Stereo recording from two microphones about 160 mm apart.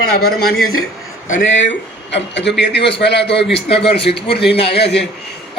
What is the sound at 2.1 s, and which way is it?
A man's voice, 90° left.